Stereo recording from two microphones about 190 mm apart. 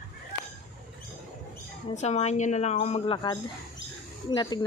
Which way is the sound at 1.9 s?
35° left (ahead or behind).